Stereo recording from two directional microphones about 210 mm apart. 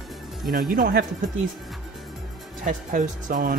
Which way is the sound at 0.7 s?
45° right (ahead or behind).